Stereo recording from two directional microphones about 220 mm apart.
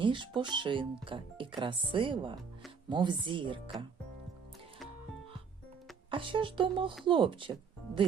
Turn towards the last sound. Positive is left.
turn(degrees=-20)  # may be behind; listen again after turning